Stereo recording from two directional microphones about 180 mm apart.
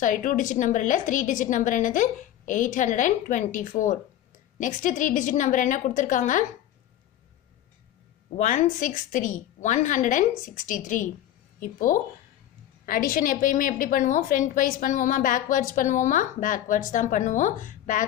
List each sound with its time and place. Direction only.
0.0 s a woman's voice: 45° left (ahead or behind)
8.4 s a woman's voice: 45° left (ahead or behind)